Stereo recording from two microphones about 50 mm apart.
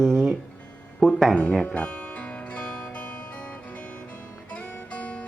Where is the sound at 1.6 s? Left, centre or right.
Left.